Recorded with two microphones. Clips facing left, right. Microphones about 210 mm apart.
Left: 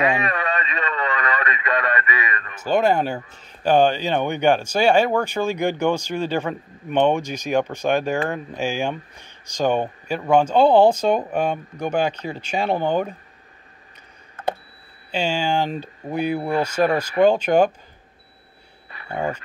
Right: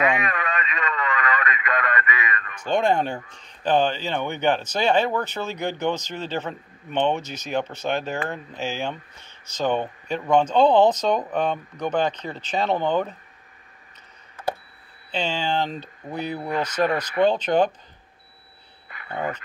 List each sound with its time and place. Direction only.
0.0 s radio: 30° left (ahead or behind)
2.6 s speech: 5° left (ahead or behind)
15.0 s speech: 10° left (ahead or behind)
16.4 s speech: 30° left (ahead or behind)
17.3 s speech: 10° left (ahead or behind)
18.9 s a sound: 30° left (ahead or behind)